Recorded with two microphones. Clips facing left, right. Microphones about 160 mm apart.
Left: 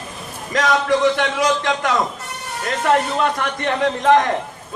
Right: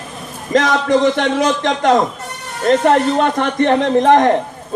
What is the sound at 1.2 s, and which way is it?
Speech, 45° right (ahead or behind).